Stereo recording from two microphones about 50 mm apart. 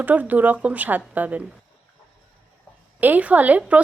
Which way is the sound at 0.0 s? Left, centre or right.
Right.